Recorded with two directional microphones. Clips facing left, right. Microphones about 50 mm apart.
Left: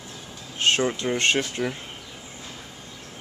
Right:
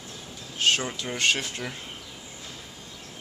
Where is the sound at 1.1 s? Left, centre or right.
Left.